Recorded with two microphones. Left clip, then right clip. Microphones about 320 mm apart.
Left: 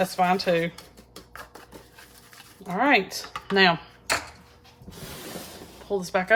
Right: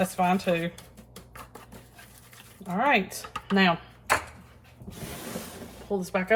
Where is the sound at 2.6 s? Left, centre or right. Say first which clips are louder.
Left 3 dB; left.